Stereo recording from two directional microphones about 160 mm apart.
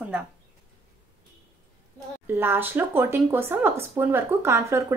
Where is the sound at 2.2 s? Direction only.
15° right (ahead or behind).